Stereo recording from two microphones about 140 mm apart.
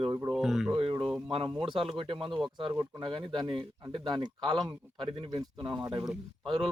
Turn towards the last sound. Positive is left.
turn(degrees=-35)  # may be behind; listen again after turning